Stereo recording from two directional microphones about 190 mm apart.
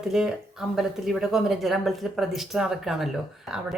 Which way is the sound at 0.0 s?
Centre (ahead or behind).